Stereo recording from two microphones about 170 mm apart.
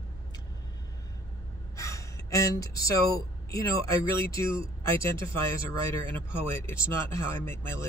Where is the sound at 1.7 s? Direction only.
20° left (ahead or behind).